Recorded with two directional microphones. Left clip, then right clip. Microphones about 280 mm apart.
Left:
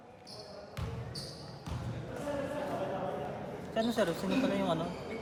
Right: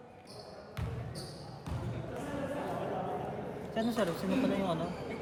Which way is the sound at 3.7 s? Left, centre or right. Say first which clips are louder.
Left 2 dB; left.